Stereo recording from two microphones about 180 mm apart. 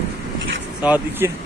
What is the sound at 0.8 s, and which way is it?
Speech, 10° right (ahead or behind).